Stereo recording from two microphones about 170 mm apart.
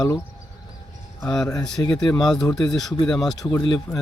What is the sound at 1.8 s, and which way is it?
Speech, 15° left (ahead or behind).